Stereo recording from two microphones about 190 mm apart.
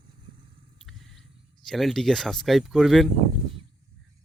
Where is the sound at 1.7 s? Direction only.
Centre (ahead or behind).